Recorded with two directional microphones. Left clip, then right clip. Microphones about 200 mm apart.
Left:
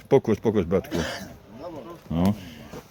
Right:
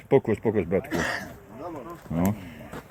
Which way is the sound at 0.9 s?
30° left (ahead or behind).